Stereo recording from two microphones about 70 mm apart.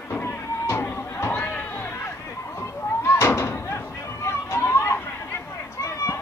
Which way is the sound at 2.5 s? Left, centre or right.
Left.